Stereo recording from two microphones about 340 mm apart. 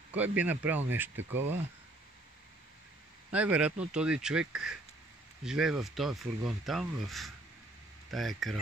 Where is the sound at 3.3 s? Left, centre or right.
Centre.